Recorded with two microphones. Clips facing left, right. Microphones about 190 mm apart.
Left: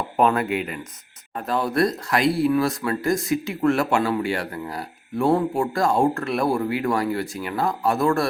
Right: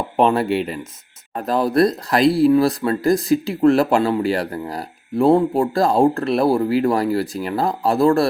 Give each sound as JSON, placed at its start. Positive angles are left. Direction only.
{"t": 0.2, "sound": "speech", "side_deg": -30}